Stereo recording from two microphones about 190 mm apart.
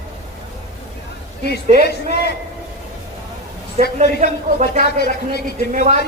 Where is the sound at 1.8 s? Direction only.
60° left (ahead or behind).